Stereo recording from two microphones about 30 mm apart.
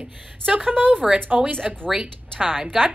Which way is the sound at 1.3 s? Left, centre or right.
Centre.